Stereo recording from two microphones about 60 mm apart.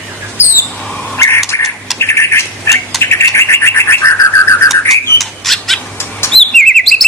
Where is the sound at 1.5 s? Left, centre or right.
Left.